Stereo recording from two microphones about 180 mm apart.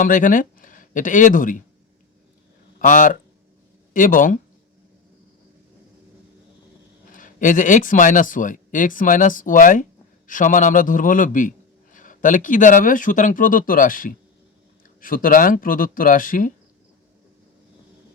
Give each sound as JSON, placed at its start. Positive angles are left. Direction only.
{"t": 0.0, "sound": "speech", "side_deg": 45}
{"t": 2.7, "sound": "a man's voice", "side_deg": 45}
{"t": 7.1, "sound": "a man's voice", "side_deg": 50}